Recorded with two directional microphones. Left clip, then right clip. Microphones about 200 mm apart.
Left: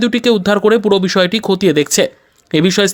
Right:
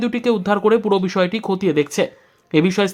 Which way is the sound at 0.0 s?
20° left (ahead or behind).